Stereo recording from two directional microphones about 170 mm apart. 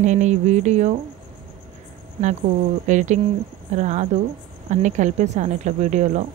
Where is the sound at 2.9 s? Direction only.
45° right (ahead or behind).